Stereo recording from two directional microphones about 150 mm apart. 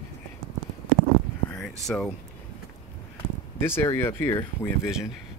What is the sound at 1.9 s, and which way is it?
Speech, 5° left (ahead or behind).